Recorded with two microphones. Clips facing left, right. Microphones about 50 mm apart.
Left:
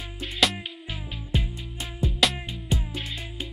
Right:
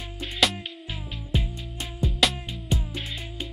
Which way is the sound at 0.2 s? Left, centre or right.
Centre.